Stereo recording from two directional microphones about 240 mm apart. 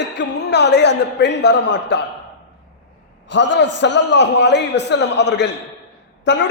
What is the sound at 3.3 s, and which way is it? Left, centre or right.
A man's voice, left.